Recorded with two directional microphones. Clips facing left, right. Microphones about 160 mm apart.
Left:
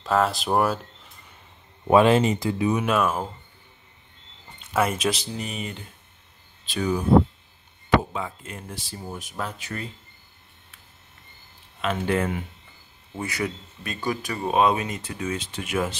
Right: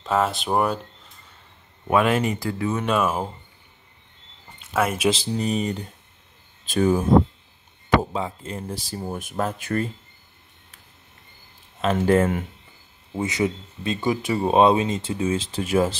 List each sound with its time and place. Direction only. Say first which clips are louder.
0.0 s speech: even; centre (ahead or behind)
1.9 s speech: left 3 dB; 30° left (ahead or behind)
2.8 s speech: right 4 dB; 5° left (ahead or behind)
4.6 s speech: even; centre (ahead or behind)
5.1 s speech: right 8 dB; 35° right (ahead or behind)
8.0 s speech: right 4 dB; 30° right (ahead or behind)
9.1 s speech: right 6 dB; 50° right (ahead or behind)
11.8 s speech: right 6 dB; 40° right (ahead or behind)
13.1 s speech: right 5 dB; 20° right (ahead or behind)